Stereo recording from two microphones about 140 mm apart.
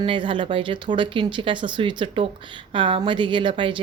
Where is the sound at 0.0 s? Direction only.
35° right (ahead or behind).